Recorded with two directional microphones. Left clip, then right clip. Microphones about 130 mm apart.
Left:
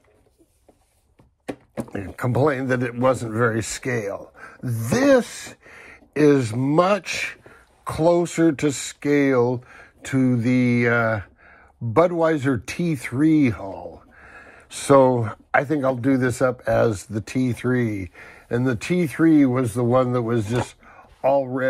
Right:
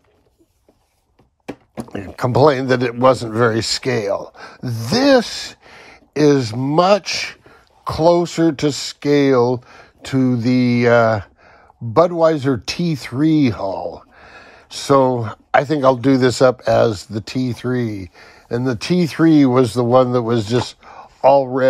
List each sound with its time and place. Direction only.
1.9 s speech: 20° right (ahead or behind)
4.6 s speech: 10° right (ahead or behind)
4.9 s speech: 25° right (ahead or behind)
13.7 s speech: 35° right (ahead or behind)
14.1 s a sound: 25° right (ahead or behind)
16.0 s speech: 20° right (ahead or behind)